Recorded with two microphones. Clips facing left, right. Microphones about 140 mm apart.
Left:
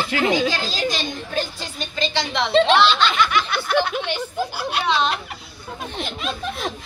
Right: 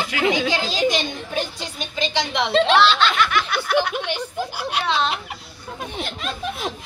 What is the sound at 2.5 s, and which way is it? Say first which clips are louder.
A woman's voice: left 1 dB; centre (ahead or behind).